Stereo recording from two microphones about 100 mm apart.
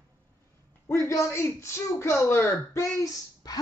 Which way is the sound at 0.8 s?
30° left (ahead or behind).